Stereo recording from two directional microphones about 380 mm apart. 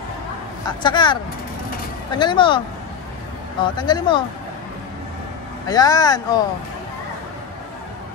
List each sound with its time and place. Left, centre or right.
0.7 s speech: centre
3.7 s speech: centre
5.7 s speech: centre